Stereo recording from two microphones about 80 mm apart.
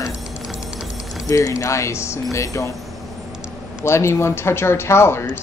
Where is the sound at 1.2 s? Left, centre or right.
Left.